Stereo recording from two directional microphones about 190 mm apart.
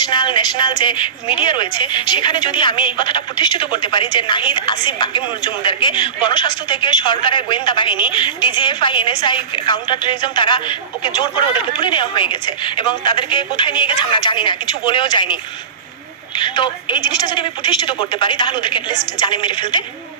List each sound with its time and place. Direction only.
0.0 s a woman's voice: 25° left (ahead or behind)
16.4 s a woman's voice: 25° left (ahead or behind)